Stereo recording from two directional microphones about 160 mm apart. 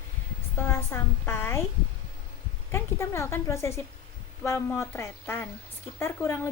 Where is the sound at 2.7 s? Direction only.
15° left (ahead or behind).